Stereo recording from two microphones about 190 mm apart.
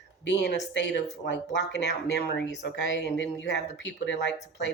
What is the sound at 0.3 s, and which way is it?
Speech, 65° left (ahead or behind).